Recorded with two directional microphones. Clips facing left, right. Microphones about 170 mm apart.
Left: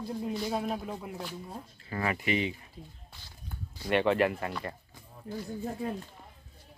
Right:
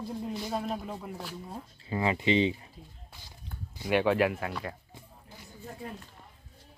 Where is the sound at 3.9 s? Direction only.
Centre (ahead or behind).